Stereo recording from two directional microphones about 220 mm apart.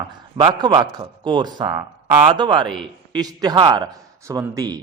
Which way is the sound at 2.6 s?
Centre (ahead or behind).